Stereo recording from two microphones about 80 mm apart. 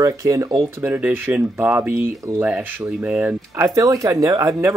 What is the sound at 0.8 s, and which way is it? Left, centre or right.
Speech, right.